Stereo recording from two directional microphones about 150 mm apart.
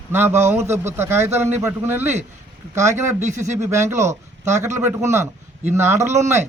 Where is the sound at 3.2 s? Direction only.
50° right (ahead or behind).